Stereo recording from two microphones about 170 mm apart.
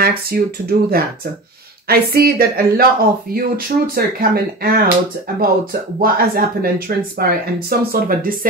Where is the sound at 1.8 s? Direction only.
65° right (ahead or behind).